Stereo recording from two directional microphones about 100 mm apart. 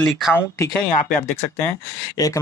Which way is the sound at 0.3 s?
20° left (ahead or behind).